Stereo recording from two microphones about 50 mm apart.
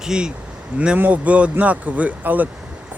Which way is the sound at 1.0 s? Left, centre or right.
Right.